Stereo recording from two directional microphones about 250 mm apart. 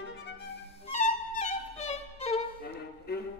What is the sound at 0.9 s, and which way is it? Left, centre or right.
Music, left.